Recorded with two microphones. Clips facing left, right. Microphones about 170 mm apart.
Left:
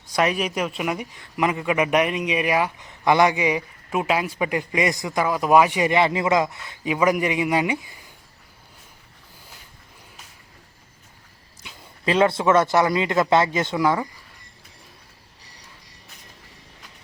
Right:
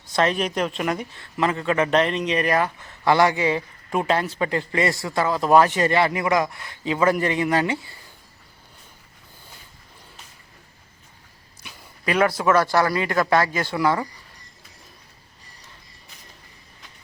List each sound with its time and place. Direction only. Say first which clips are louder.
0.1 s a man's voice: even; 10° left (ahead or behind)
11.6 s a man's voice: left 2 dB; 25° left (ahead or behind)